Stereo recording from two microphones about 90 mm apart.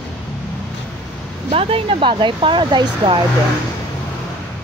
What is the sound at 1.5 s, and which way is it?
Speech, 90° right.